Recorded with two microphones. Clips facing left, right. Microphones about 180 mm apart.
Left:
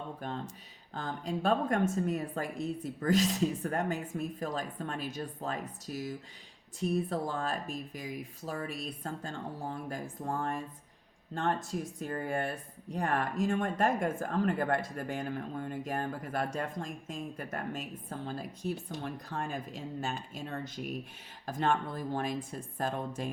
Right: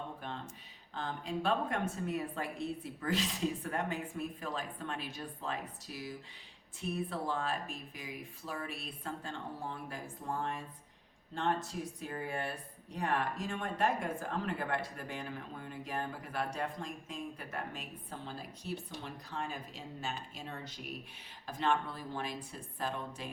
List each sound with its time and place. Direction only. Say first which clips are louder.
0.2 s a woman's voice: left 5 dB; 40° left (ahead or behind)